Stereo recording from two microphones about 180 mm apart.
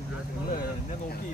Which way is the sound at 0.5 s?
50° left (ahead or behind).